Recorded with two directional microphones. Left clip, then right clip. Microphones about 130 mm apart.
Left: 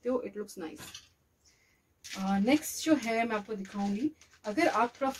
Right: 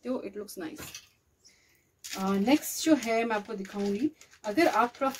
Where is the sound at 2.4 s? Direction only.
15° left (ahead or behind).